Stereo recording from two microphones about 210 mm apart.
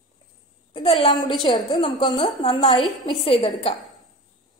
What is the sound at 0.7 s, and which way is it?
A woman's voice, 25° left (ahead or behind).